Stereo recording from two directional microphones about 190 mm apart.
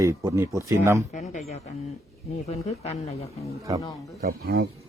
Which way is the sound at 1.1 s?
40° left (ahead or behind).